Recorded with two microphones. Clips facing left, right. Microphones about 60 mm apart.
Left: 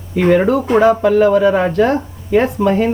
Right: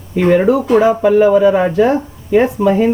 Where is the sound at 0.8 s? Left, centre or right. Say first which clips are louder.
Left 2 dB; centre.